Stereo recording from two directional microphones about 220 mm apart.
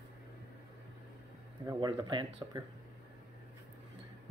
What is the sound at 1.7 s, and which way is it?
Speech, 20° right (ahead or behind).